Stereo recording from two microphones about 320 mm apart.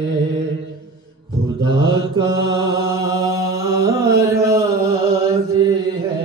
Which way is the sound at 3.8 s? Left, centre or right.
Centre.